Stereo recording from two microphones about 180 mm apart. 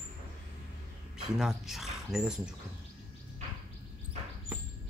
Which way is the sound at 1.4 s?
Centre (ahead or behind).